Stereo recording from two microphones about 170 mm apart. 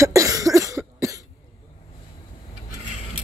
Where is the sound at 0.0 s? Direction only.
20° right (ahead or behind).